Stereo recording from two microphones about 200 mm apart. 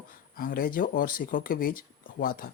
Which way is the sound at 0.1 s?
45° left (ahead or behind).